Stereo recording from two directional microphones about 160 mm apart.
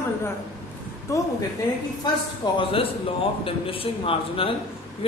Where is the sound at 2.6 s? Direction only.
35° left (ahead or behind).